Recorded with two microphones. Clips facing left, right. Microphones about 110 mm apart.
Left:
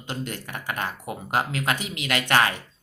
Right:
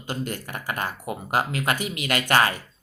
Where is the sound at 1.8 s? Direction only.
55° right (ahead or behind).